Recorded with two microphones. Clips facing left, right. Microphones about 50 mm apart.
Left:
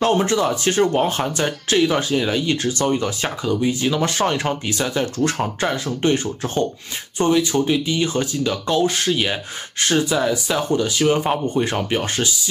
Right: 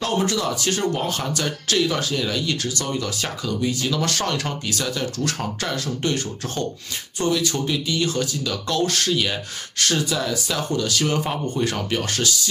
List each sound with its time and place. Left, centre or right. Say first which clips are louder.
0.0 s speech: left 5 dB; left